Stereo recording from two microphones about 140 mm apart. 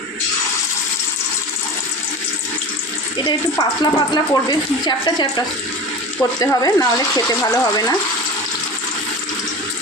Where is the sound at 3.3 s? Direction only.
35° left (ahead or behind).